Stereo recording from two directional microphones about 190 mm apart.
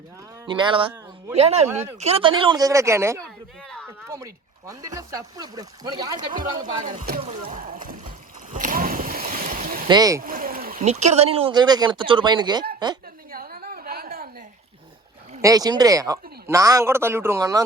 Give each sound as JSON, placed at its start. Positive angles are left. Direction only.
{"t": 0.4, "sound": "speech", "side_deg": -25}
{"t": 6.8, "sound": "speech", "side_deg": -45}
{"t": 8.5, "sound": "boat", "side_deg": -45}
{"t": 9.9, "sound": "speech", "side_deg": -20}
{"t": 10.2, "sound": "a sound", "side_deg": -50}
{"t": 10.8, "sound": "speech", "side_deg": -35}
{"t": 13.3, "sound": "a sound", "side_deg": -50}
{"t": 15.4, "sound": "speech", "side_deg": -20}